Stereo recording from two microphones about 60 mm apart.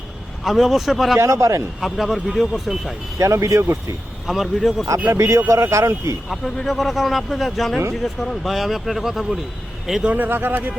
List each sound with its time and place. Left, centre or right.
0.4 s speech: centre
1.2 s speech: right
1.8 s speech: centre
3.2 s speech: right
4.3 s speech: centre
5.1 s speech: right
6.2 s a man's voice: centre
10.1 s a man's voice: right